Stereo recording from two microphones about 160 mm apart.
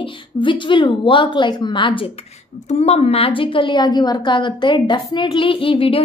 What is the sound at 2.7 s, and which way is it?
A woman's voice, 40° left (ahead or behind).